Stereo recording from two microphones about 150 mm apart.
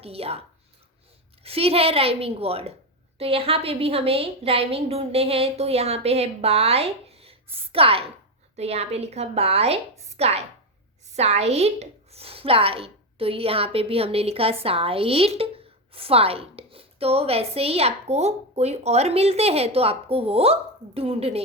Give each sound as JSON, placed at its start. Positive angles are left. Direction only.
{"t": 0.0, "sound": "a woman's voice", "side_deg": -40}
{"t": 1.5, "sound": "a woman's voice", "side_deg": -40}